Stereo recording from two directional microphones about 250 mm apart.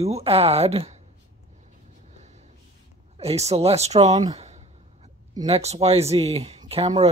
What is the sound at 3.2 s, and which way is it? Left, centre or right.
Speech, right.